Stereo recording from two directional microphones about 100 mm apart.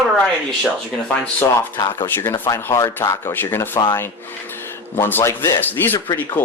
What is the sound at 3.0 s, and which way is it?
Speech, 25° left (ahead or behind).